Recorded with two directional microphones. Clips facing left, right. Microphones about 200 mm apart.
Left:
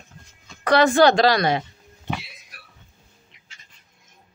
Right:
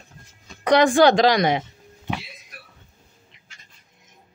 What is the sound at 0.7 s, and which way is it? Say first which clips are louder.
Speech: right 1 dB; 15° right (ahead or behind).